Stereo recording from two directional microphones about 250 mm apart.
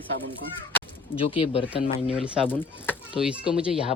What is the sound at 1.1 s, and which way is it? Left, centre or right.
Speech, left.